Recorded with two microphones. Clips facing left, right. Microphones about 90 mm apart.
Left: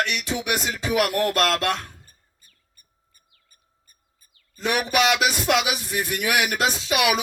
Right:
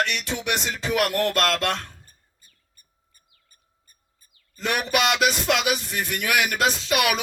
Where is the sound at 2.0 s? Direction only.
35° right (ahead or behind).